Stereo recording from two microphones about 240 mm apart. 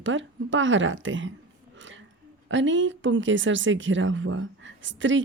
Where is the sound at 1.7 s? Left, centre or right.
Right.